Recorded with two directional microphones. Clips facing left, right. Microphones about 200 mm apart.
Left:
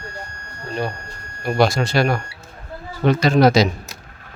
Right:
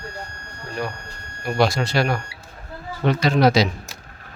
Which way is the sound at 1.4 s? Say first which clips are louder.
Left 2 dB; 50° left (ahead or behind).